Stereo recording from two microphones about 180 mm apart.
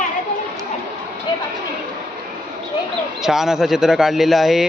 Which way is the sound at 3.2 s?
Centre (ahead or behind).